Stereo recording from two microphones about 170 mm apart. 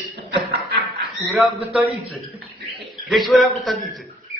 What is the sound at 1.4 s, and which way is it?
A man's voice, 5° right (ahead or behind).